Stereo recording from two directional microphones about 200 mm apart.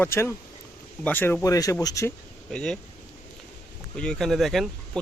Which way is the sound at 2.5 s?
5° left (ahead or behind).